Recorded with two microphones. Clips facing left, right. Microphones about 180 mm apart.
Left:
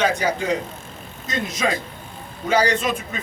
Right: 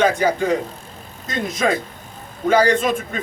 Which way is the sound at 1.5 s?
50° right (ahead or behind).